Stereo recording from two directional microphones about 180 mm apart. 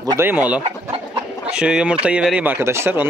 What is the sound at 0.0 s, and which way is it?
Speech, 15° right (ahead or behind).